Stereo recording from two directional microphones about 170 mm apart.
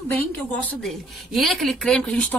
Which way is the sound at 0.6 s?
5° left (ahead or behind).